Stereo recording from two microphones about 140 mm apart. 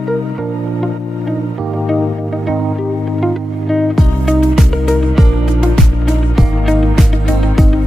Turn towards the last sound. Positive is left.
turn(degrees=0)  # may be behind; listen again after turning